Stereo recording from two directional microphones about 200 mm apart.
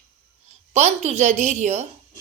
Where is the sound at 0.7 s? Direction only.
35° right (ahead or behind).